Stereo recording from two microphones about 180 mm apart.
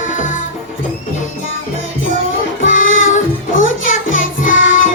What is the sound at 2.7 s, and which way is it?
Music, 45° left (ahead or behind).